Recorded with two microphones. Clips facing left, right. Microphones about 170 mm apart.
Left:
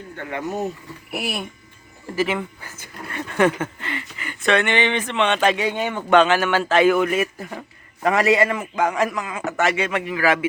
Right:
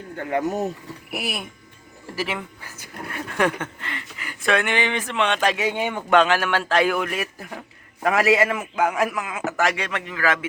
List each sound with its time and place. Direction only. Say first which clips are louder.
0.2 s speech: right 5 dB; 40° right (ahead or behind)
1.1 s speech: left 2 dB; centre (ahead or behind)
6.1 s speech: left 2 dB; centre (ahead or behind)